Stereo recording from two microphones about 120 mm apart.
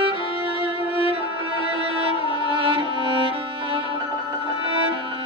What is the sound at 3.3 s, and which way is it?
Violin, 50° right (ahead or behind).